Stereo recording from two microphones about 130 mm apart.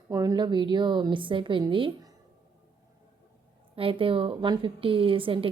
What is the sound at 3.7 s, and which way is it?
A woman's voice, 45° right (ahead or behind).